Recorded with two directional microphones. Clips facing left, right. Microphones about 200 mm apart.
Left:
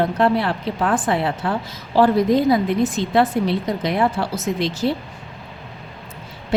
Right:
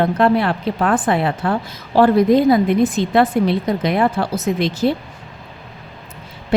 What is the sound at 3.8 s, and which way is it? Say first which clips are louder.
Speech: right 2 dB; 60° right (ahead or behind).